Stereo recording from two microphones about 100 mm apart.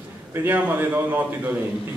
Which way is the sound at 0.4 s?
20° right (ahead or behind).